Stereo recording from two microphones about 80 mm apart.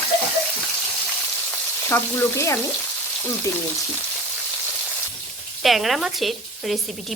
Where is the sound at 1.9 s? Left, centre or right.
Left.